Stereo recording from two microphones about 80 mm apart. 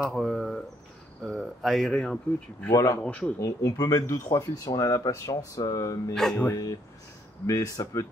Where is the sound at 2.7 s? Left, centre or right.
Left.